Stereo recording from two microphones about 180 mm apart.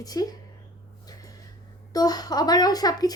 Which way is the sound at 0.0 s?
20° left (ahead or behind).